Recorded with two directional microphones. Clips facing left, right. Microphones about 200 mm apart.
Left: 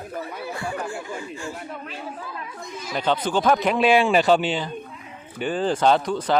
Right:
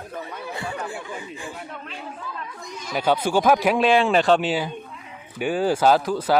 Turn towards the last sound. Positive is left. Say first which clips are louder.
# right 1 dB
turn(degrees=-5)  # may be behind; listen again after turning